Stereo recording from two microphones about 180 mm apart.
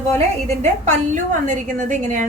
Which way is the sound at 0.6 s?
40° right (ahead or behind).